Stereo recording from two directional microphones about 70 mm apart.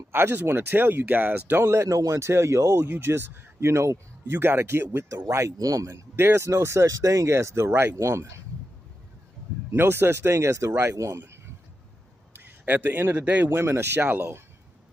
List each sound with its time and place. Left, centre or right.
0.1 s speech: right
1.6 s speech: right
4.3 s speech: right
5.1 s speech: right
5.9 s speech: right
6.9 s speech: right
9.7 s speech: right
12.6 s speech: right
13.5 s speech: right